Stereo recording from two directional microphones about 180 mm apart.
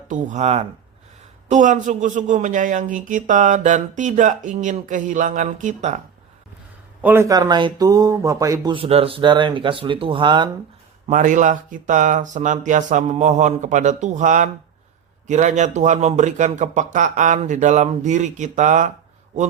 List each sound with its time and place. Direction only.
0.1 s speech: 40° right (ahead or behind)
7.0 s speech: 15° right (ahead or behind)
8.7 s speech: 30° right (ahead or behind)
11.1 s speech: 45° right (ahead or behind)